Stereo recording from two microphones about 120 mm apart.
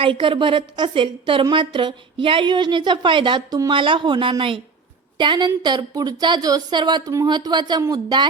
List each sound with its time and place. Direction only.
0.0 s a woman's voice: 45° right (ahead or behind)